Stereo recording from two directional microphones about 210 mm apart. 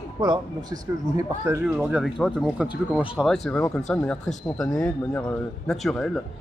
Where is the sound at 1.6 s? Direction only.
5° right (ahead or behind).